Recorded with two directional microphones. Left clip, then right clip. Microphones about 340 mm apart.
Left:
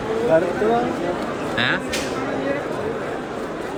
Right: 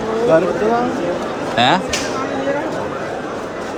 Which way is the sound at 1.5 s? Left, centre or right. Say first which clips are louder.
Right 8 dB; centre.